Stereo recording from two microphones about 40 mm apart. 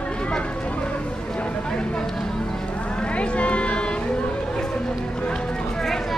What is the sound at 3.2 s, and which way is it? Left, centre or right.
Speech, left.